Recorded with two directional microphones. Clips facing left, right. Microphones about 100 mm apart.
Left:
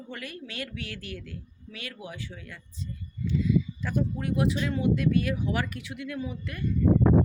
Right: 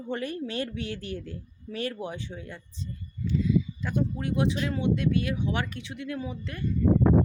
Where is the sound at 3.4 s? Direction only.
25° right (ahead or behind).